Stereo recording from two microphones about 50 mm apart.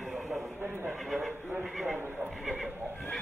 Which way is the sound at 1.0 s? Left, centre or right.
Centre.